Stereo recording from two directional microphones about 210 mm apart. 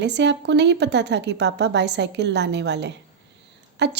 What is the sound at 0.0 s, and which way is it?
A woman's voice, 55° right (ahead or behind).